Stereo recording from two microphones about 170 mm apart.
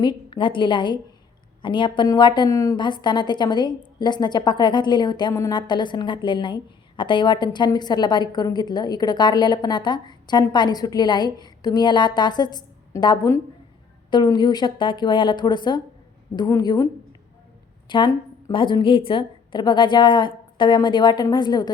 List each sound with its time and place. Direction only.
0.0 s a woman's voice: 25° left (ahead or behind)